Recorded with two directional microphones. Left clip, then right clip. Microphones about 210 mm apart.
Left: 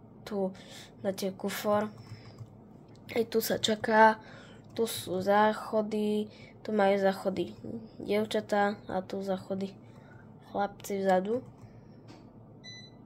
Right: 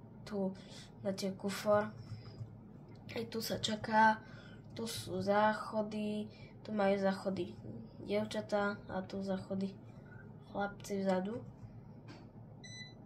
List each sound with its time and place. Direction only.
0.2 s speech: 50° left (ahead or behind)
3.1 s speech: 50° left (ahead or behind)